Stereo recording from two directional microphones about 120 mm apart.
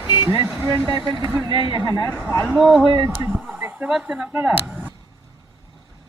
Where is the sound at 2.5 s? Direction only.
5° right (ahead or behind).